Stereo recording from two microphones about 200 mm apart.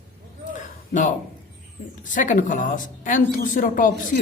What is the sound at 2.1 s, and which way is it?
A man's voice, 40° left (ahead or behind).